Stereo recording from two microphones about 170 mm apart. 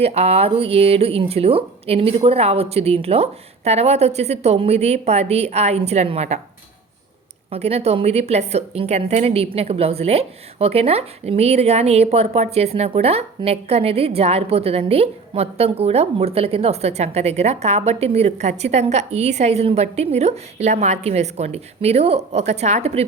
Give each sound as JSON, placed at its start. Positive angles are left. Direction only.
{"t": 0.0, "sound": "a woman's voice", "side_deg": -35}
{"t": 7.5, "sound": "a woman's voice", "side_deg": -35}